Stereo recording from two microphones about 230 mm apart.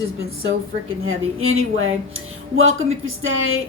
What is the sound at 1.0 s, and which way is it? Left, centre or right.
Speech, right.